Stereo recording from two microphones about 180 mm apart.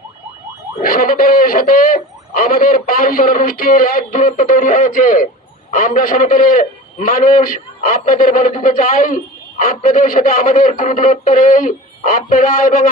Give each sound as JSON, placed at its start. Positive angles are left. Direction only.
{"t": 0.8, "sound": "speech", "side_deg": 55}